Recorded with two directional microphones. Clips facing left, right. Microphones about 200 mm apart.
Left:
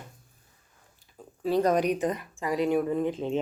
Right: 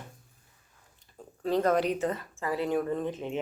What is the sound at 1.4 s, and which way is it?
Speech, 15° left (ahead or behind).